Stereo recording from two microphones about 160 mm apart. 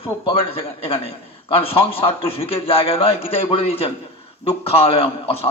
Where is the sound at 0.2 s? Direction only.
35° left (ahead or behind).